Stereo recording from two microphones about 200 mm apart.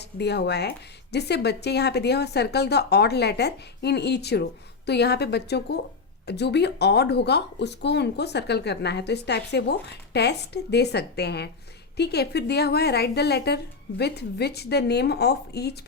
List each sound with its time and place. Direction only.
0.0 s speech: 55° left (ahead or behind)